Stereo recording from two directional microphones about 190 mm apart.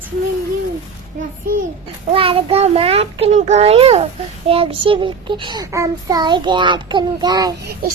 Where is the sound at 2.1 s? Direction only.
30° right (ahead or behind).